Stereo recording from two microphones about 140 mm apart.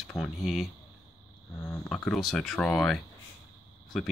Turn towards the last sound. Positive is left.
turn(degrees=0)  # may be behind; listen again after turning